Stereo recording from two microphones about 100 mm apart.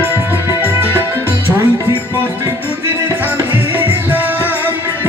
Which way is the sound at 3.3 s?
20° right (ahead or behind).